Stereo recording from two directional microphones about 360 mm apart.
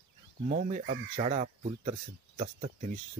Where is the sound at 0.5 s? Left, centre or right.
Centre.